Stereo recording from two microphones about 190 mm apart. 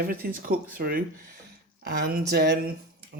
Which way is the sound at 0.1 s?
50° right (ahead or behind).